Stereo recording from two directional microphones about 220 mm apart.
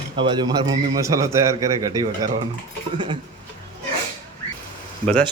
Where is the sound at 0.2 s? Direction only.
20° right (ahead or behind).